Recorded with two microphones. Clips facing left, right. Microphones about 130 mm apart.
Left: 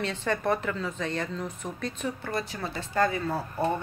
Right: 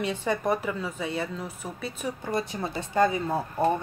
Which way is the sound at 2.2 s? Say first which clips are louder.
Right 3 dB; 20° right (ahead or behind).